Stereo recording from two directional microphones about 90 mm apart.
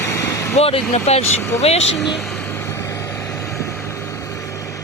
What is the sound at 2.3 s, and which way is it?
Vehicle, 25° left (ahead or behind).